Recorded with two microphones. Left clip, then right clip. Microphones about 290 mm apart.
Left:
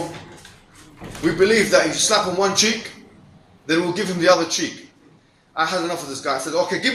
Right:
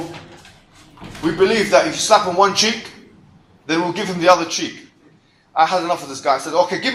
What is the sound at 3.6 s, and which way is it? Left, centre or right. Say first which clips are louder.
Speech: right 1 dB; centre.